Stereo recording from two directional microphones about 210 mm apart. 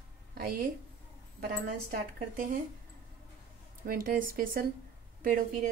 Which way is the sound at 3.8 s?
45° right (ahead or behind).